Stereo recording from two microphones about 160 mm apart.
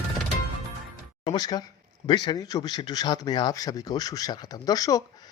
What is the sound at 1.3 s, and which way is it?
Speech, 25° left (ahead or behind).